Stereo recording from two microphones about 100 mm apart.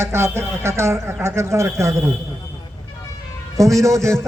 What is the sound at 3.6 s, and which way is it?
Speech, 30° right (ahead or behind).